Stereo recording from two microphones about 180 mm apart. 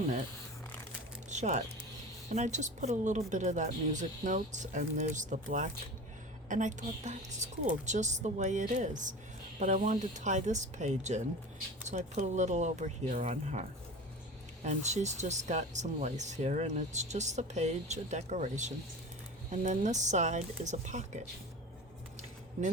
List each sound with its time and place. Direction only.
1.3 s speech: 40° right (ahead or behind)